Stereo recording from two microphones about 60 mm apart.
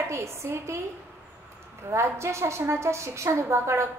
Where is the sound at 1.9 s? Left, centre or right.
Right.